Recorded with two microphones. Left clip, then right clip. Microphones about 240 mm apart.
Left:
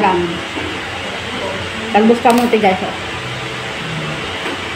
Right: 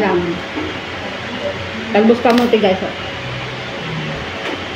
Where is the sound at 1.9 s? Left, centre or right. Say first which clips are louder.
Left 1 dB; centre.